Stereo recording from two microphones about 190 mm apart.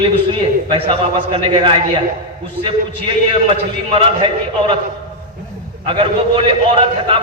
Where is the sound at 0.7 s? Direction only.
30° right (ahead or behind).